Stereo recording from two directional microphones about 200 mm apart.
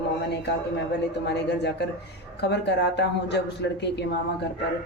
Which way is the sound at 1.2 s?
55° left (ahead or behind).